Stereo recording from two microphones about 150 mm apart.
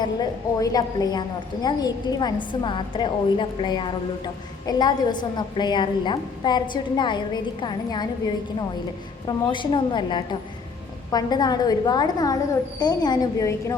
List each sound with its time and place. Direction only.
0.0 s a woman's voice: 25° left (ahead or behind)
9.2 s a woman's voice: 30° left (ahead or behind)